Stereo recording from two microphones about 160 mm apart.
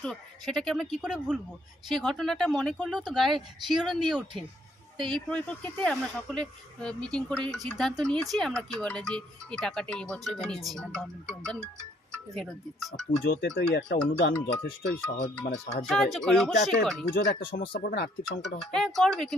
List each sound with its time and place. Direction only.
0.0 s speech: centre (ahead or behind)
4.9 s speech: 30° right (ahead or behind)
5.3 s speech: 10° left (ahead or behind)
13.2 s speech: 85° left
16.1 s speech: centre (ahead or behind)
17.2 s speech: 75° left (ahead or behind)
18.6 s speech: centre (ahead or behind)